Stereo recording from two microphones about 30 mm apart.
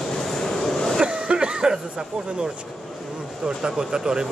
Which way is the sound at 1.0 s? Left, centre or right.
Right.